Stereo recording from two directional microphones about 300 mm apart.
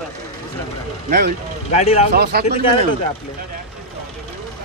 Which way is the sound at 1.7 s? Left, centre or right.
Left.